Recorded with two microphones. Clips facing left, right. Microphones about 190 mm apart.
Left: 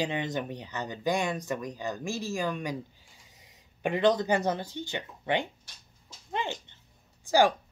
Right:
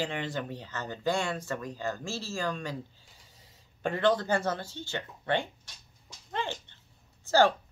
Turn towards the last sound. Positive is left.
turn(degrees=15)  # may be behind; listen again after turning